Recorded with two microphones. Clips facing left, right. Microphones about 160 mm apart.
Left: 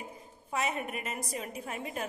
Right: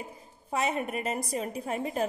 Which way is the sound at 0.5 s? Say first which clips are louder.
Right 4 dB; 30° right (ahead or behind).